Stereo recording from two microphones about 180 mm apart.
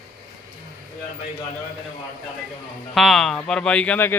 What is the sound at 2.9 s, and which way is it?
Speech, centre (ahead or behind).